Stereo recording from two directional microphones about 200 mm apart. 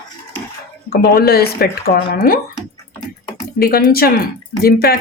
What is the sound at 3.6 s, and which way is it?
Speech, 45° left (ahead or behind).